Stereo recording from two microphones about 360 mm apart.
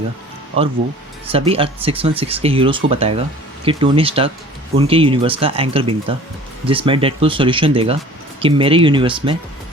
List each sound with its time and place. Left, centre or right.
1.3 s speech: centre